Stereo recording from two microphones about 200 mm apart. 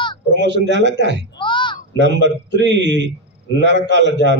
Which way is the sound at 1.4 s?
25° left (ahead or behind).